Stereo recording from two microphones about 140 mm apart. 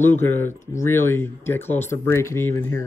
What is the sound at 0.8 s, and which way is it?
Speech, 15° left (ahead or behind).